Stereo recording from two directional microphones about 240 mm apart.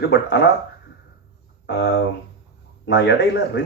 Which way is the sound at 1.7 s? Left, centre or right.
Left.